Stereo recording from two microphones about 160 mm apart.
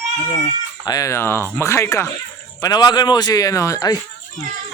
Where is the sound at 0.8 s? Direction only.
20° left (ahead or behind).